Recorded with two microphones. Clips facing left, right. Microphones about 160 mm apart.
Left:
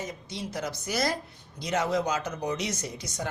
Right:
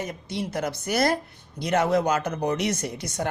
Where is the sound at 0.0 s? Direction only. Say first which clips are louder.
Right 5 dB; 60° right (ahead or behind).